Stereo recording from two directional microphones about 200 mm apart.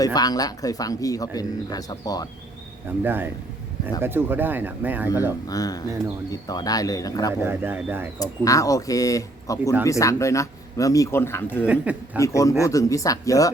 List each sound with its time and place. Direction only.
0.0 s speech: 20° left (ahead or behind)
3.0 s speech: 10° right (ahead or behind)
5.5 s speech: 20° left (ahead or behind)
7.4 s speech: 10° right (ahead or behind)
8.2 s speech: 15° left (ahead or behind)
11.6 s speech: 5° right (ahead or behind)
12.2 s speech: 15° left (ahead or behind)